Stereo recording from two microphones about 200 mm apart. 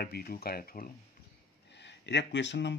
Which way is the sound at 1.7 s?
60° left (ahead or behind).